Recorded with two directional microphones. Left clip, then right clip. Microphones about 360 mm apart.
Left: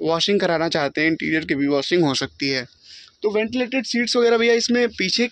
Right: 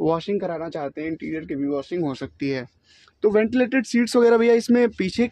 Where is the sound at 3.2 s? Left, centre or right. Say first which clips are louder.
Right 2 dB; right.